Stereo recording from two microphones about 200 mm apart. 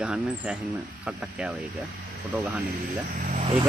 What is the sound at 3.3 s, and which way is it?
Vehicle, 30° right (ahead or behind).